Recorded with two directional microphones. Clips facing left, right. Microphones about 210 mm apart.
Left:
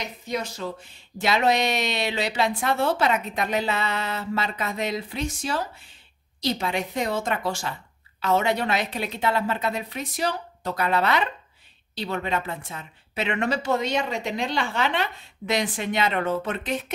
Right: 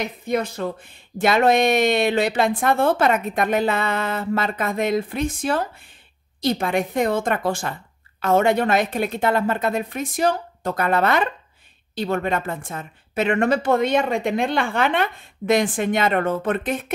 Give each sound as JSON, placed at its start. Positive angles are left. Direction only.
{"t": 0.0, "sound": "speech", "side_deg": -55}